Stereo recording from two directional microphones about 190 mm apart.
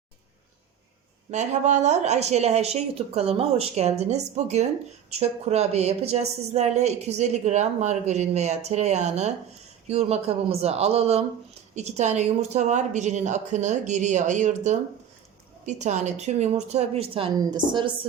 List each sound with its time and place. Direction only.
1.3 s a woman's voice: 40° right (ahead or behind)